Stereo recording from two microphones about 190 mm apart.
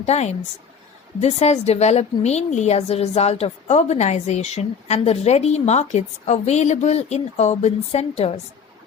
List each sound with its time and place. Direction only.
0.0 s a woman's voice: 35° left (ahead or behind)